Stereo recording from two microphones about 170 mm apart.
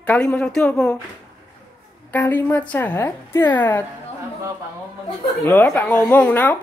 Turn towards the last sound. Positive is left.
turn(degrees=10)  # may be behind; listen again after turning